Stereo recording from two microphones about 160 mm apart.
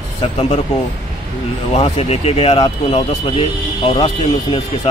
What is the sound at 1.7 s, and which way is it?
Speech, 40° left (ahead or behind).